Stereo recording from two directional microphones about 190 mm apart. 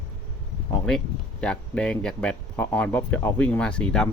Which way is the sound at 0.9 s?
5° left (ahead or behind).